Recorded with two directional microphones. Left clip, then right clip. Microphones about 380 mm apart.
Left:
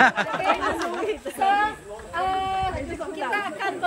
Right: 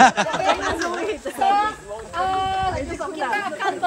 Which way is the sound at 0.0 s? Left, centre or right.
Centre.